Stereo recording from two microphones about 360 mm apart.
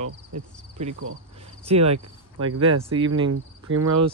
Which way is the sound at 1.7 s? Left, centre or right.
Centre.